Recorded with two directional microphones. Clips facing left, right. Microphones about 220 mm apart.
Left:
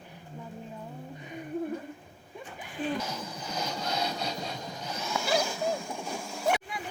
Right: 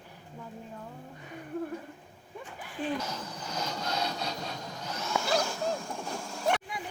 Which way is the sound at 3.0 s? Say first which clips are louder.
Left 1 dB; 10° left (ahead or behind).